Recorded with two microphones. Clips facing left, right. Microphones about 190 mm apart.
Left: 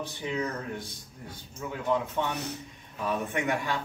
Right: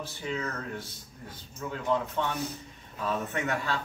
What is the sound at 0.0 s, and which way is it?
Speech, 15° left (ahead or behind).